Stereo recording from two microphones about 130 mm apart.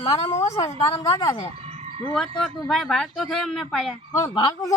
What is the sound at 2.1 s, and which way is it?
A woman's voice, 5° left (ahead or behind).